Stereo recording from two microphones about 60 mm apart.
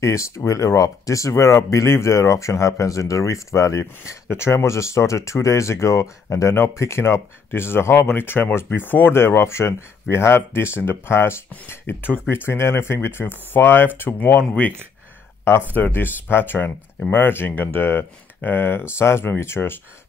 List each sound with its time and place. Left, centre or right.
0.0 s speech: left
6.8 s speech: left
15.7 s speech: left